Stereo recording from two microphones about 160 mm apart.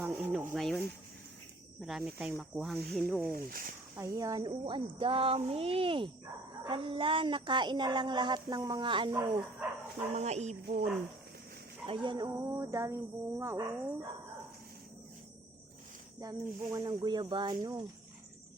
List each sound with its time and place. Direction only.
0.0 s snake: 5° right (ahead or behind)
0.5 s speech: centre (ahead or behind)
3.3 s speech: 65° right (ahead or behind)
3.9 s speech: 20° right (ahead or behind)
10.2 s speech: 45° right (ahead or behind)
11.9 s speech: 30° right (ahead or behind)
16.2 s speech: 20° right (ahead or behind)